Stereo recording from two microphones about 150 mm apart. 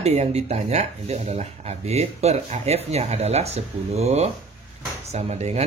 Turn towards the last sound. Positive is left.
turn(degrees=-45)  # may be behind; listen again after turning